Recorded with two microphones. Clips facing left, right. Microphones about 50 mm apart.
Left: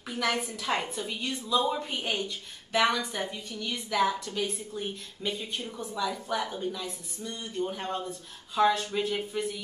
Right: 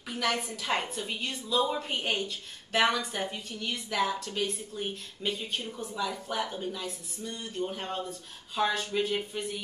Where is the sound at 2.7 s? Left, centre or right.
Centre.